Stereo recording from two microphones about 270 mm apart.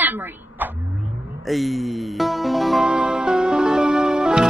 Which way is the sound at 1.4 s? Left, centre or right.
Centre.